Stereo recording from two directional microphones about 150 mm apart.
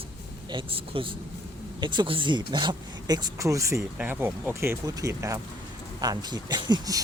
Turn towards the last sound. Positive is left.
turn(degrees=-25)  # may be behind; listen again after turning